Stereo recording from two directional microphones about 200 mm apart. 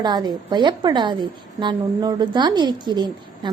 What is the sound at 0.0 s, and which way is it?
A woman's voice, 20° right (ahead or behind).